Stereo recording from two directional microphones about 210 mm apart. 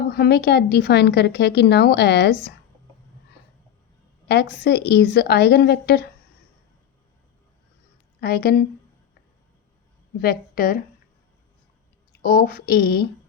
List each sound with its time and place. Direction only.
0.1 s a woman's voice: 50° left (ahead or behind)
4.3 s a woman's voice: 50° left (ahead or behind)
8.2 s a woman's voice: 50° left (ahead or behind)
10.2 s a woman's voice: 45° left (ahead or behind)
12.2 s a woman's voice: 45° left (ahead or behind)